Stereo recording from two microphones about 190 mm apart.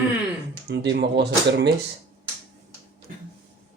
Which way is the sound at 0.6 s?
60° right (ahead or behind).